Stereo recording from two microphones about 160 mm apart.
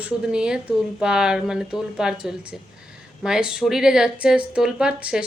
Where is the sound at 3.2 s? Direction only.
5° right (ahead or behind).